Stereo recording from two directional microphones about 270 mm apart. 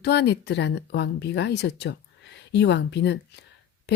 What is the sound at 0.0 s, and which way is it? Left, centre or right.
Speech, left.